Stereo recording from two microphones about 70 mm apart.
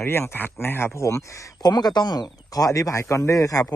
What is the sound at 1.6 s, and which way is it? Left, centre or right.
Speech, left.